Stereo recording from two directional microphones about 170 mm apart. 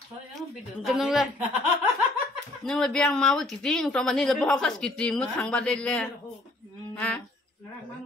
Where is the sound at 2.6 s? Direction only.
5° left (ahead or behind).